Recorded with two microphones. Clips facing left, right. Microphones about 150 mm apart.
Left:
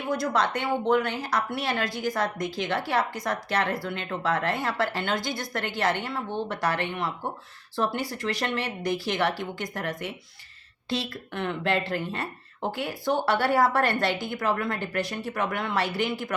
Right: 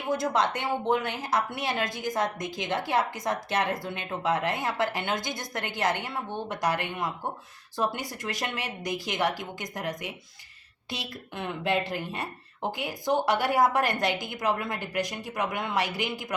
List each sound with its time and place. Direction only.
0.1 s a woman's voice: 20° right (ahead or behind)